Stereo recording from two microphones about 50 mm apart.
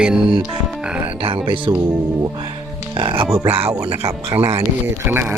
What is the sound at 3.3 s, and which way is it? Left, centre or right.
Speech, right.